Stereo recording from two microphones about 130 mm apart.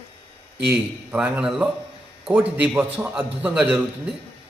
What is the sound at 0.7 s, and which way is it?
A man's voice, 10° right (ahead or behind).